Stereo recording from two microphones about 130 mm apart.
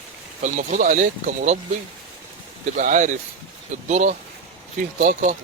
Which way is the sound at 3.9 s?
65° right (ahead or behind).